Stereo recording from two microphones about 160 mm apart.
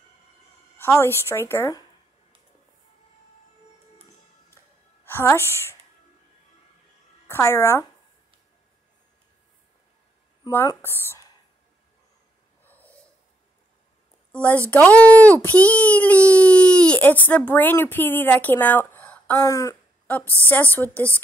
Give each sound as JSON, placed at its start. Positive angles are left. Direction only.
{"t": 0.7, "sound": "a child's voice", "side_deg": 15}
{"t": 5.0, "sound": "a woman's voice", "side_deg": 15}
{"t": 7.2, "sound": "speech", "side_deg": 15}
{"t": 10.5, "sound": "a child's voice", "side_deg": 15}
{"t": 14.3, "sound": "a child's voice", "side_deg": 10}
{"t": 19.4, "sound": "a child's voice", "side_deg": 20}